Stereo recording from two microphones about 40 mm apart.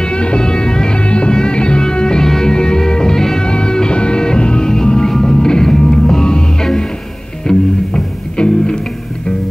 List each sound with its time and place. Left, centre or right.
0.0 s music: left